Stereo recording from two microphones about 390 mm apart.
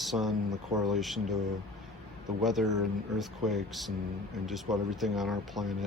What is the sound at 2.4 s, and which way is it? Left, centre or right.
Speech, centre.